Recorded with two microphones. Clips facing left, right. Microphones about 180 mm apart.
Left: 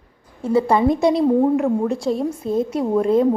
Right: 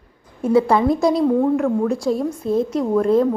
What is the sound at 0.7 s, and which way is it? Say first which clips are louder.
A woman's voice: even; centre (ahead or behind).